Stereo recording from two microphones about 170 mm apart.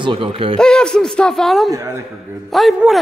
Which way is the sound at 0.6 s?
5° left (ahead or behind).